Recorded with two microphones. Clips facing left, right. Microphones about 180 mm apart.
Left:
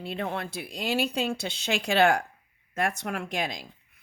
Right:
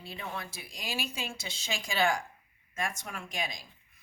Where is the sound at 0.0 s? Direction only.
65° left (ahead or behind).